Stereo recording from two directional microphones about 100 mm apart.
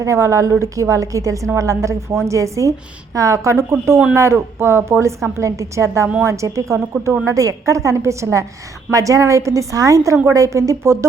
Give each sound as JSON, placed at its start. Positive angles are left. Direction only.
{"t": 0.0, "sound": "a woman's voice", "side_deg": -30}